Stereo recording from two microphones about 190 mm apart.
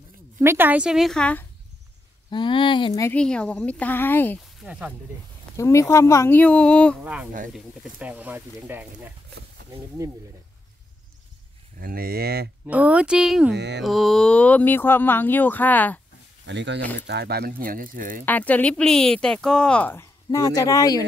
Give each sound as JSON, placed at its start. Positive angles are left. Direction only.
{"t": 0.4, "sound": "speech", "side_deg": -10}
{"t": 2.3, "sound": "speech", "side_deg": 25}
{"t": 3.2, "sound": "speech", "side_deg": 5}
{"t": 4.6, "sound": "speech", "side_deg": -5}
{"t": 5.6, "sound": "speech", "side_deg": 15}
{"t": 7.0, "sound": "speech", "side_deg": -5}
{"t": 11.8, "sound": "speech", "side_deg": -50}
{"t": 12.6, "sound": "speech", "side_deg": -5}
{"t": 13.5, "sound": "speech", "side_deg": -60}
{"t": 13.8, "sound": "speech", "side_deg": 0}
{"t": 16.4, "sound": "speech", "side_deg": -70}
{"t": 18.2, "sound": "speech", "side_deg": 10}